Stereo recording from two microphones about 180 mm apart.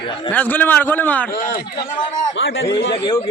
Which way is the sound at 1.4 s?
45° left (ahead or behind).